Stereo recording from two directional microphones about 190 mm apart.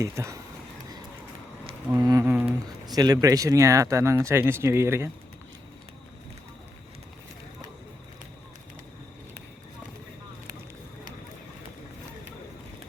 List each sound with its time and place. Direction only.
0.0 s speech: 15° right (ahead or behind)
1.9 s speech: 20° right (ahead or behind)
2.8 s speech: 20° right (ahead or behind)